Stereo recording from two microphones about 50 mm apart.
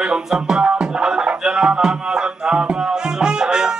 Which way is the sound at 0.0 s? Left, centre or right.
Centre.